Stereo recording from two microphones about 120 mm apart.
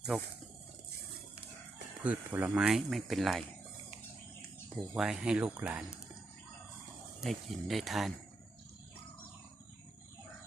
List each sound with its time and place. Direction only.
0.1 s speech: 5° left (ahead or behind)
2.0 s speech: 10° right (ahead or behind)
4.9 s speech: 5° right (ahead or behind)
7.2 s speech: centre (ahead or behind)